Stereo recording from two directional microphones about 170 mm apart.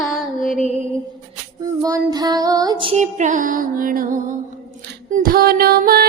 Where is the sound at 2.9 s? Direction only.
45° right (ahead or behind).